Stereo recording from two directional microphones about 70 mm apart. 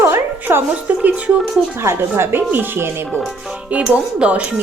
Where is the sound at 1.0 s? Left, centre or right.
Centre.